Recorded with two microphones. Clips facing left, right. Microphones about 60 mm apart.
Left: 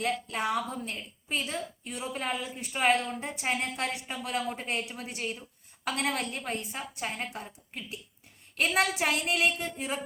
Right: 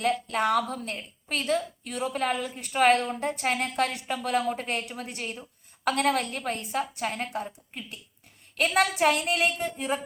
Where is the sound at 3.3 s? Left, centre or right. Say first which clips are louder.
Right 4 dB; centre.